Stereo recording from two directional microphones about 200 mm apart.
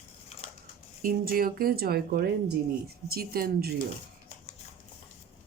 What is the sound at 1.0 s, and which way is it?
Speech, 45° right (ahead or behind).